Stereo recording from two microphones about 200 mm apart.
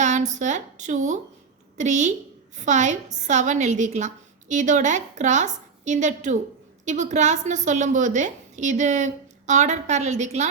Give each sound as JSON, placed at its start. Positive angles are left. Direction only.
{"t": 0.0, "sound": "a woman's voice", "side_deg": -35}